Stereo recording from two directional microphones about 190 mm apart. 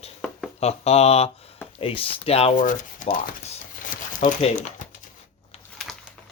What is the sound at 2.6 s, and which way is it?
Speech, 45° left (ahead or behind).